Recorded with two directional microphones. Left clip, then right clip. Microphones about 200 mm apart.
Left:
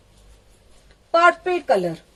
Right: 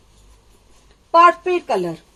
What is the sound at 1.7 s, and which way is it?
Speech, 10° left (ahead or behind).